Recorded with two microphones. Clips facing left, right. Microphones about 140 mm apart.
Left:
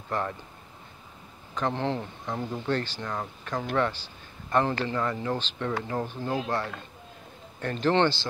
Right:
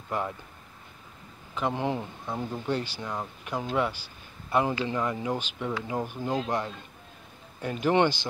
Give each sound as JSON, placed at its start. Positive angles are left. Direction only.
{"t": 0.1, "sound": "speech", "side_deg": -10}
{"t": 1.5, "sound": "speech", "side_deg": -10}